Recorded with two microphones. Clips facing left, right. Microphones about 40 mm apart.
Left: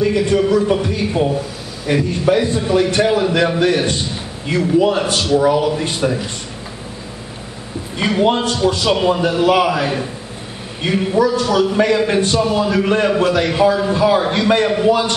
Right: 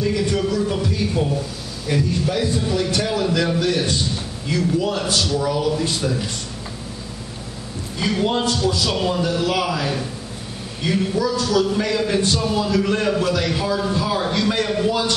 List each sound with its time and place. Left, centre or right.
0.0 s a man's voice: left
8.0 s a man's voice: left